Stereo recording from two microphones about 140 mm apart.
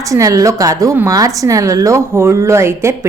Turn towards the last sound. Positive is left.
turn(degrees=-20)  # may be behind; listen again after turning